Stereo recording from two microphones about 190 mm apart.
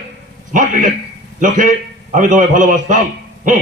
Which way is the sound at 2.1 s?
40° right (ahead or behind).